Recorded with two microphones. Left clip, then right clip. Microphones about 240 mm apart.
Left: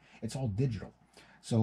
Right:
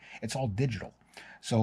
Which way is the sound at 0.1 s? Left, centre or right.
Centre.